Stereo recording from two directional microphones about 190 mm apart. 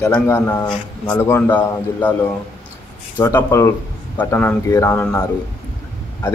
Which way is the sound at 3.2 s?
15° left (ahead or behind).